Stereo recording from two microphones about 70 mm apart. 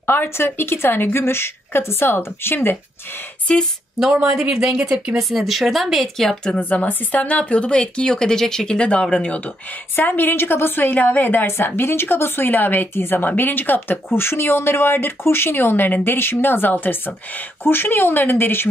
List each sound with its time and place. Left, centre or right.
0.0 s speech: left
3.5 s speech: centre
4.1 s speech: centre
6.6 s speech: left
9.9 s speech: left